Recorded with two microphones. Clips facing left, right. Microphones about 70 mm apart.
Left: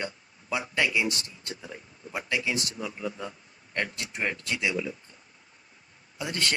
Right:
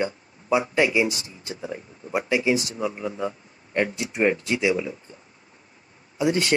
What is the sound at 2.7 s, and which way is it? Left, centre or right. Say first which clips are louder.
Speech: right 6 dB; right.